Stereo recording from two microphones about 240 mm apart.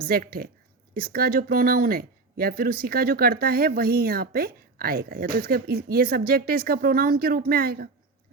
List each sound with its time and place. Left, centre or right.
0.0 s speech: right